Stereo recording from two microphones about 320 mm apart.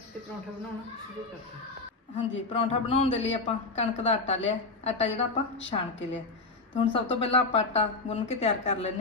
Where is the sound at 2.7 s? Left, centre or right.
Centre.